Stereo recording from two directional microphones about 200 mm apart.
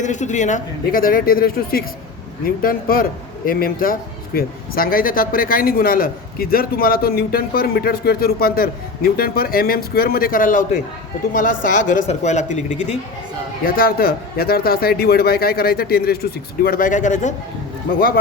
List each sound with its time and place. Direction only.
0.0 s a man's voice: 35° left (ahead or behind)
13.7 s a man's voice: 45° left (ahead or behind)